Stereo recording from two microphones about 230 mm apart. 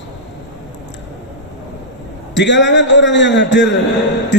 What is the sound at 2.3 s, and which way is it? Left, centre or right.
Speech, left.